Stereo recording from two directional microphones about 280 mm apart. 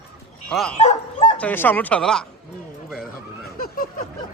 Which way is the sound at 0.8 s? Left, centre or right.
Left.